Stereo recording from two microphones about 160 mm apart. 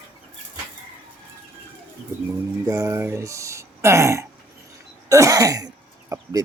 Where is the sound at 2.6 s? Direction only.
20° right (ahead or behind).